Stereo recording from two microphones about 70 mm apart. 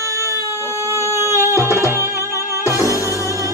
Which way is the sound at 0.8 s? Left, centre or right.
Right.